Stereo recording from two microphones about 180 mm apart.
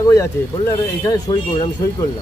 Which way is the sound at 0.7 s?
20° left (ahead or behind).